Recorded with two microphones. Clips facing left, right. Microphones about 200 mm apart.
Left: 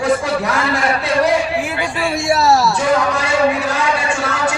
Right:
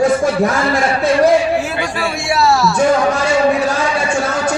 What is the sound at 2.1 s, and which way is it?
Speech, 40° left (ahead or behind).